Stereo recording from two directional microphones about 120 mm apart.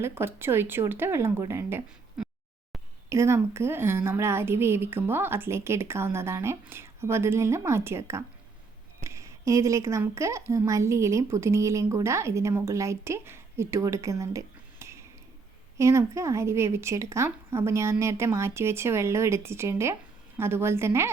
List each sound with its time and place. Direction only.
0.0 s a woman's voice: 20° right (ahead or behind)
3.1 s a woman's voice: 25° right (ahead or behind)